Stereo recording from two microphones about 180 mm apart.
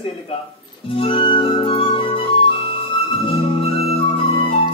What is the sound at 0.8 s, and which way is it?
Music, 30° left (ahead or behind).